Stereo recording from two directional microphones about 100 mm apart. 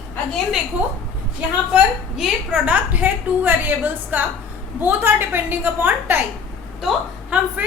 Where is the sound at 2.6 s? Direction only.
15° right (ahead or behind).